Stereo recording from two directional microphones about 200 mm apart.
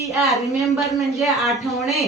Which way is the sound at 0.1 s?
Centre (ahead or behind).